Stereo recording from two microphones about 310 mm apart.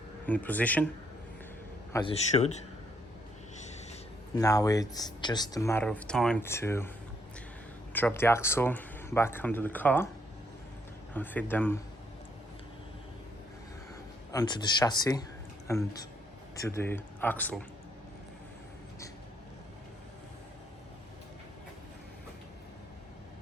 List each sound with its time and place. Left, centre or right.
0.3 s speech: centre
1.9 s a man's voice: centre
4.4 s speech: centre
7.9 s speech: centre
11.1 s speech: centre
14.3 s speech: centre